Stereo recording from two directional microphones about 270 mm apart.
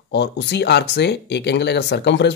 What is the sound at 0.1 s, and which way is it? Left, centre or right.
Speech, left.